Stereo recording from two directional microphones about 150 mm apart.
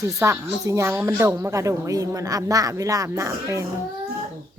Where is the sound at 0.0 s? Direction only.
20° right (ahead or behind).